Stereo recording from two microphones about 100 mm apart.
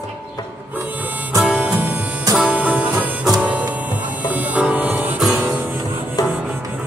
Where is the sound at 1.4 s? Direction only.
10° right (ahead or behind).